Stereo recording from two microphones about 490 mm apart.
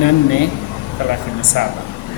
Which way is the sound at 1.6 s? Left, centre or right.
Left.